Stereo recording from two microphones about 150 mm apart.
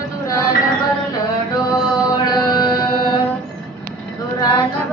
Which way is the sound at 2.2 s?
30° left (ahead or behind).